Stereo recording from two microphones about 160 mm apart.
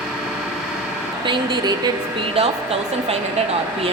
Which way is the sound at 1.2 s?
30° right (ahead or behind).